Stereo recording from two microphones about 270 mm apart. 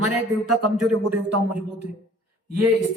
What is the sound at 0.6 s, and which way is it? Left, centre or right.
Speech, right.